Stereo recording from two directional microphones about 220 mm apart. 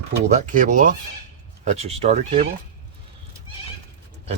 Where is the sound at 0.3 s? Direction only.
35° right (ahead or behind).